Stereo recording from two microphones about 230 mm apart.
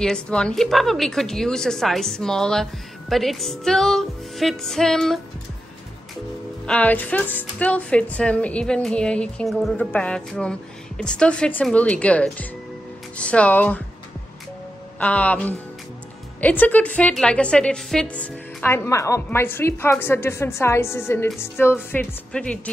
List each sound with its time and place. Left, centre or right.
0.0 s speech: centre
6.6 s speech: centre
15.0 s a woman's voice: centre